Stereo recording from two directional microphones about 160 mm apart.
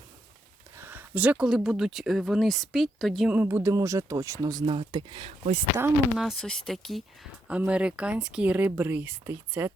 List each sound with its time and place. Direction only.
0.8 s speech: 10° right (ahead or behind)
3.3 s speech: 15° right (ahead or behind); by 5.8 s 35° right (ahead or behind)
6.1 s speech: centre (ahead or behind)